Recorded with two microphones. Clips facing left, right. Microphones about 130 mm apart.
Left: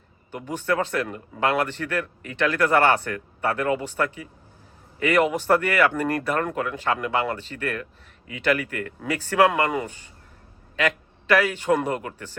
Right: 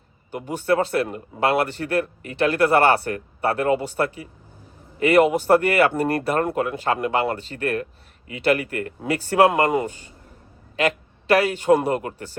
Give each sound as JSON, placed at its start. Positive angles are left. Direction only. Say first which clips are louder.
{"t": 0.3, "sound": "a man's voice", "louder": "right 2 dB", "side_deg": -15}
{"t": 0.6, "sound": "speech", "louder": "right 4 dB", "side_deg": -35}